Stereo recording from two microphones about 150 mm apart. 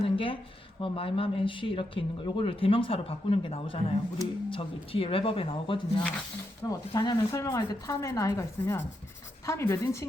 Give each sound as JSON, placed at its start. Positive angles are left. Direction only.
{"t": 0.0, "sound": "a sound", "side_deg": 35}
{"t": 0.8, "sound": "speech", "side_deg": 35}
{"t": 6.7, "sound": "speech", "side_deg": 25}